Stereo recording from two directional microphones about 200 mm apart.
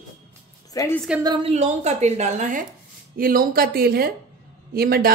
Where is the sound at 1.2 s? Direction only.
30° right (ahead or behind).